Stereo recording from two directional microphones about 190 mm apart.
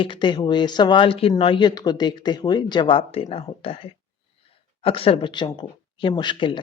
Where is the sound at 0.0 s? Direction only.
25° left (ahead or behind).